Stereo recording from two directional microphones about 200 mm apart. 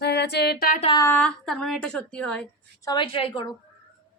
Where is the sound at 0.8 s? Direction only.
25° left (ahead or behind).